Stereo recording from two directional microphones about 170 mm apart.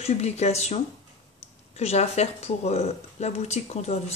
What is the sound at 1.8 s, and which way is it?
Speech, 40° left (ahead or behind).